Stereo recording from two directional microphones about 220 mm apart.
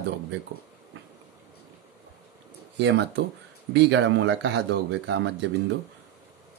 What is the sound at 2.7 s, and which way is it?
Speech, 55° right (ahead or behind).